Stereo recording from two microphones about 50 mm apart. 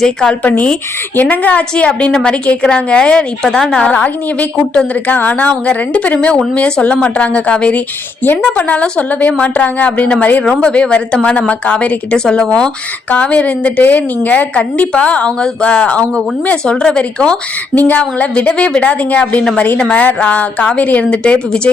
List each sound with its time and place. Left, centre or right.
0.0 s a woman's voice: centre
0.4 s a woman's voice: left
2.1 s a woman's voice: centre
3.9 s a woman's voice: left
4.5 s a woman's voice: centre
5.0 s a woman's voice: left
10.4 s a woman's voice: left
17.7 s a woman's voice: left; by 21.7 s centre